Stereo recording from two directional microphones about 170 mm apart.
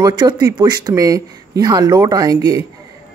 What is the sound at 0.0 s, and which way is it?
A man's voice, 25° right (ahead or behind).